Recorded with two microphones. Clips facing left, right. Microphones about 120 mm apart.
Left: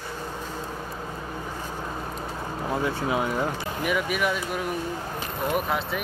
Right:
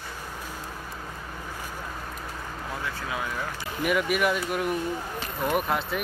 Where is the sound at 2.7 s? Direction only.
35° left (ahead or behind).